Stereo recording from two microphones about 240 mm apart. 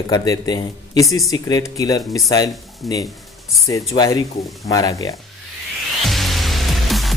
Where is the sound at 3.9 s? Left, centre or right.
Centre.